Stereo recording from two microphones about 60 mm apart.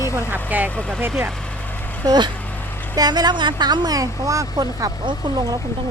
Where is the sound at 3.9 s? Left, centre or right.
Right.